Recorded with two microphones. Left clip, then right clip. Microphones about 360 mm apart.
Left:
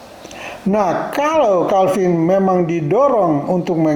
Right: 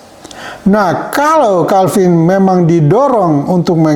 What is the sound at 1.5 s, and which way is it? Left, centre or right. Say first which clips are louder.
Speech: right 4 dB; right.